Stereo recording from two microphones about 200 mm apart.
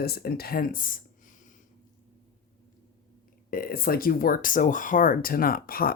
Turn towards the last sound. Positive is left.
turn(degrees=45)  # may be behind; listen again after turning